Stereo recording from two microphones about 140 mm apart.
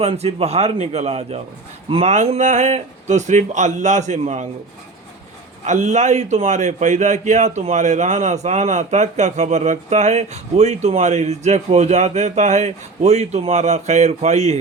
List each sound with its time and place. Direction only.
0.0 s a man's voice: 45° right (ahead or behind)
5.6 s speech: 60° right (ahead or behind)